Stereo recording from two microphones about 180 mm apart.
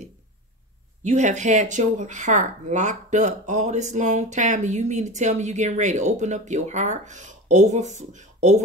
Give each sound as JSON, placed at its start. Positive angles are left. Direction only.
{"t": 1.0, "sound": "speech", "side_deg": -40}